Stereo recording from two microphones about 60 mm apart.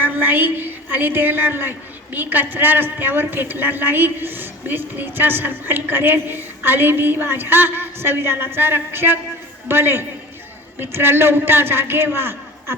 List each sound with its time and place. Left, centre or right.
0.0 s a woman's voice: right